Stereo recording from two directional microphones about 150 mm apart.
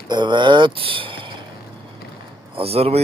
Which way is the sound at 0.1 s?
30° right (ahead or behind).